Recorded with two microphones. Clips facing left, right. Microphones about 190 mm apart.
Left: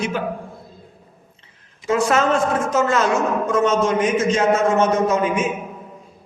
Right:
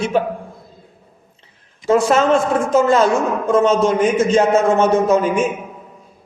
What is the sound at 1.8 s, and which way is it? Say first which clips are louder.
A man's voice: right 4 dB; 30° right (ahead or behind).